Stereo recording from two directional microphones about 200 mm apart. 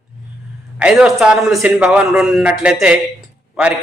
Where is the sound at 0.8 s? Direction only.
5° right (ahead or behind).